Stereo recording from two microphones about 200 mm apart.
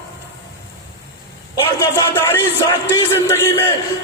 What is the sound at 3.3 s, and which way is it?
Speech, 10° left (ahead or behind).